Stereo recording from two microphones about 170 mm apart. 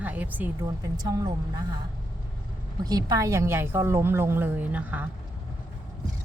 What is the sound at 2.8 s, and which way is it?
Speech, 20° right (ahead or behind).